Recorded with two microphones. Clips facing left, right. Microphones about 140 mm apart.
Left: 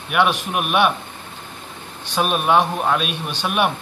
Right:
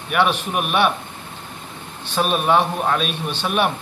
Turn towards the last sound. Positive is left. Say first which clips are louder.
# even
turn(degrees=5)  # may be behind; listen again after turning